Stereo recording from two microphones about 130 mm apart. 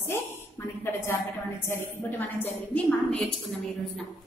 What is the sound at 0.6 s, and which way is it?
Speech, 20° left (ahead or behind).